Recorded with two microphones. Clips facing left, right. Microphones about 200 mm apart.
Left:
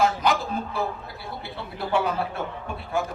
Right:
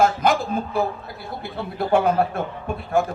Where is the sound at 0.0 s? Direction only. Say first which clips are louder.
Right 4 dB; 50° right (ahead or behind).